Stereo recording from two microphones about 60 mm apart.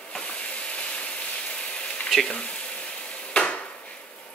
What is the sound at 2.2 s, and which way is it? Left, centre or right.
Stir, centre.